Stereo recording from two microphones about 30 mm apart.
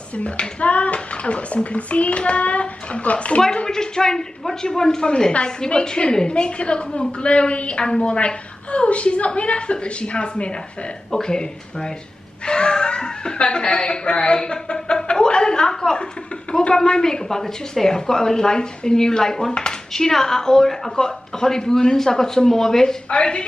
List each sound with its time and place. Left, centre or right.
0.6 s a child's voice: left
3.6 s a woman's voice: left
11.1 s a woman's voice: left
12.4 s chuckle: left
16.5 s a woman's voice: left
17.0 s a woman's voice: centre